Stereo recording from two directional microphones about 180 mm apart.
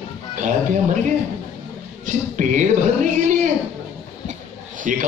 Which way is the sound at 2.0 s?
45° right (ahead or behind).